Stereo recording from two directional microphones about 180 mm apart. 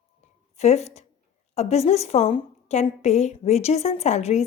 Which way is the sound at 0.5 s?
35° left (ahead or behind).